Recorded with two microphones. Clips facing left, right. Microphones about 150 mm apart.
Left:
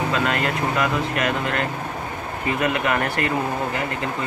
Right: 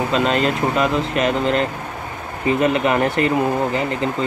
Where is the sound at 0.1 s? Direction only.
25° right (ahead or behind).